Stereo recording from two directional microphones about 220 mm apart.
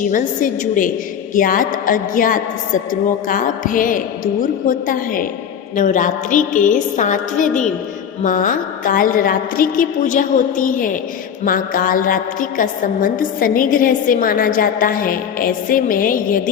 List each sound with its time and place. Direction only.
0.1 s a woman's voice: 35° left (ahead or behind)
5.7 s a woman's voice: 35° left (ahead or behind)